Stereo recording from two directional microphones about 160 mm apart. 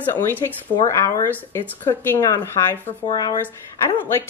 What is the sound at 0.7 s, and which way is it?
A woman's voice, 20° left (ahead or behind).